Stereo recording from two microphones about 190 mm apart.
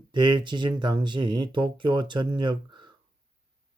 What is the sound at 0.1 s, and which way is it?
Speech, 25° right (ahead or behind).